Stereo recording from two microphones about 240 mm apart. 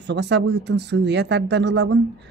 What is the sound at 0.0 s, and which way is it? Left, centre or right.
A woman's voice, right.